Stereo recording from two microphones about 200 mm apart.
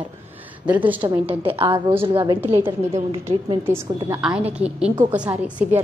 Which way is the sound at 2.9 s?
30° right (ahead or behind).